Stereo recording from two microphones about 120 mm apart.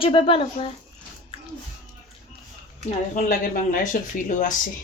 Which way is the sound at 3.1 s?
90° left.